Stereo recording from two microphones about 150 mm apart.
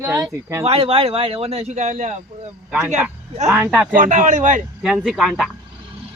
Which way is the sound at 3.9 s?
60° right (ahead or behind).